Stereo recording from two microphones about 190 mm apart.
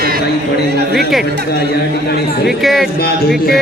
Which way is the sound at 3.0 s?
55° left (ahead or behind).